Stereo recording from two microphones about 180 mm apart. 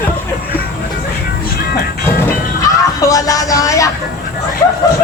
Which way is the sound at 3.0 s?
20° left (ahead or behind).